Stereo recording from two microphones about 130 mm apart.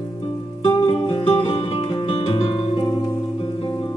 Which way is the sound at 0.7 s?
40° left (ahead or behind).